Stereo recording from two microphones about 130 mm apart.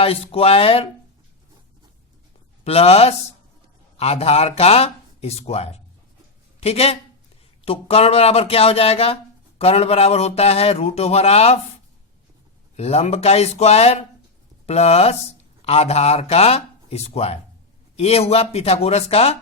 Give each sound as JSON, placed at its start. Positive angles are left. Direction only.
{"t": 0.0, "sound": "speech", "side_deg": 50}
{"t": 2.6, "sound": "speech", "side_deg": 50}
{"t": 12.7, "sound": "speech", "side_deg": 55}